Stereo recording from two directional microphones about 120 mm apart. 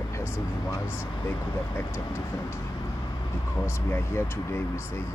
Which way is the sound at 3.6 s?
20° left (ahead or behind).